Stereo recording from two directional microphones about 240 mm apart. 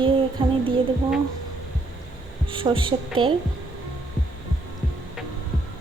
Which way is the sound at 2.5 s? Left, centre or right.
Right.